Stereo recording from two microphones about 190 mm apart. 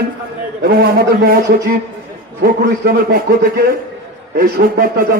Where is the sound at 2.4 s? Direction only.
55° right (ahead or behind).